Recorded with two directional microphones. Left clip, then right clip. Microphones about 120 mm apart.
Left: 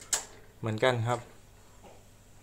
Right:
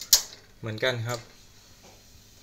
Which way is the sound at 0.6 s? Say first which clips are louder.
Left 1 dB; 15° left (ahead or behind).